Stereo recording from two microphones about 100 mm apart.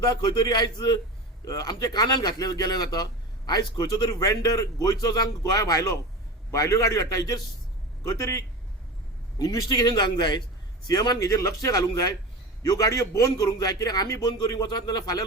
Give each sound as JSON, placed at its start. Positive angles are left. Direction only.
{"t": 0.0, "sound": "a man's voice", "side_deg": 45}